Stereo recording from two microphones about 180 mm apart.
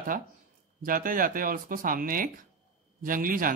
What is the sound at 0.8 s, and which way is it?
Speech, 50° right (ahead or behind).